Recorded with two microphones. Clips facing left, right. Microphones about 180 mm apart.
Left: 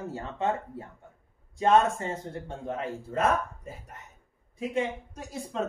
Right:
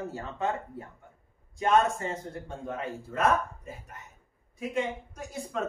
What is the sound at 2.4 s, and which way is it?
Speech, 30° left (ahead or behind).